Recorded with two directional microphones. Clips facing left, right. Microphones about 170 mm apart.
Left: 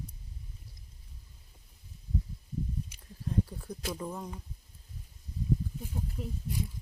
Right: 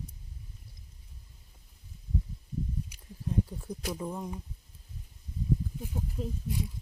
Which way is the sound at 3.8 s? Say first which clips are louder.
Right 2 dB; 10° right (ahead or behind).